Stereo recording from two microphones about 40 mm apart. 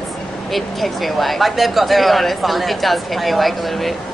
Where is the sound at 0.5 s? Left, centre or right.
Centre.